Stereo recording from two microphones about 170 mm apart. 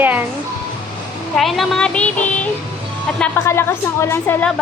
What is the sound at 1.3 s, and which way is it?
Speech, centre (ahead or behind).